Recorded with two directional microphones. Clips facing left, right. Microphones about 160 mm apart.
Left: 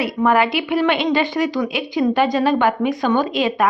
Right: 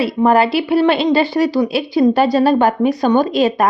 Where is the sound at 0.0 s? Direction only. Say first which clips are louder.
Right 4 dB; 30° right (ahead or behind).